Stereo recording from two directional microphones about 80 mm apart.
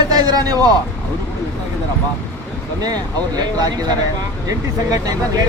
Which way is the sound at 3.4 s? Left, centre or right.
Right.